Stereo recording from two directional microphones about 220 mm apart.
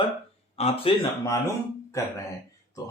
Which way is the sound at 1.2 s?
15° left (ahead or behind).